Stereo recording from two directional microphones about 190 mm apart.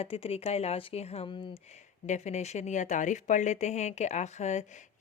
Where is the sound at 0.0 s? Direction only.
30° left (ahead or behind).